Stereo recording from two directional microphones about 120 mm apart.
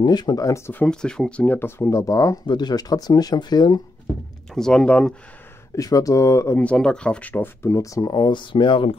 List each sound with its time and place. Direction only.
0.0 s speech: 35° left (ahead or behind)
0.7 s speech: 5° left (ahead or behind); by 3.8 s 40° left (ahead or behind)
4.6 s speech: 5° left (ahead or behind)
5.8 s speech: 30° left (ahead or behind)
6.6 s speech: 10° left (ahead or behind); by 8.9 s 45° left (ahead or behind)